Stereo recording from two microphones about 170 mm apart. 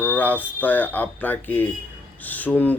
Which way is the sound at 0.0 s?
10° left (ahead or behind).